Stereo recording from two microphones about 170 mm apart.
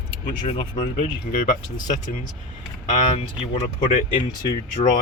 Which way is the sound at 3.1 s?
45° left (ahead or behind).